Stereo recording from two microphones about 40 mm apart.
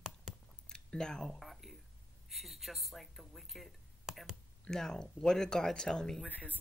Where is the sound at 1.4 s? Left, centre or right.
Centre.